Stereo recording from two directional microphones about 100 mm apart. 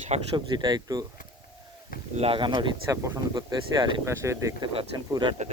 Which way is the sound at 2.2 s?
65° right (ahead or behind).